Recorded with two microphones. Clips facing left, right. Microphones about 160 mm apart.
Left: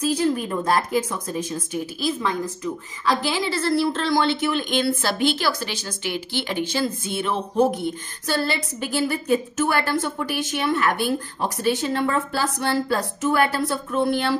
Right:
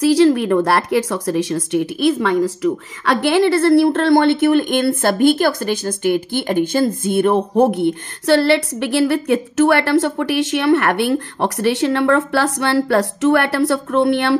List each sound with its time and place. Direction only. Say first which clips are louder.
0.0 s speech: right 9 dB; 80° right